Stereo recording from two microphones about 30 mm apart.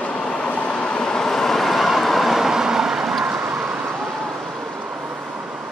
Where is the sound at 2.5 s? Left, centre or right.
Centre.